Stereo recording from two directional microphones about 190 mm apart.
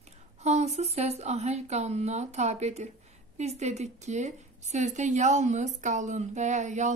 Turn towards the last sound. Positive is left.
turn(degrees=-40)  # may be behind; listen again after turning